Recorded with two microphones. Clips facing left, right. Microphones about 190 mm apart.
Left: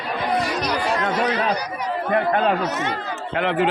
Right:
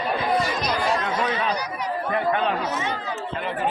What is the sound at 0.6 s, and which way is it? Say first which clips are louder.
Chatter: left 1 dB; 75° left (ahead or behind).